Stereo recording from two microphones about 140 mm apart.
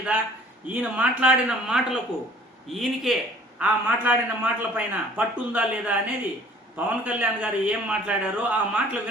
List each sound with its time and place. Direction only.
0.1 s a man's voice: 10° right (ahead or behind)